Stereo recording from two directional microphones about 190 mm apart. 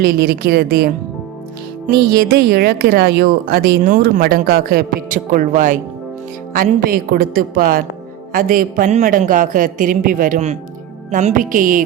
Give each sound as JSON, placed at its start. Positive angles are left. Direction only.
{"t": 0.0, "sound": "a woman's voice", "side_deg": -55}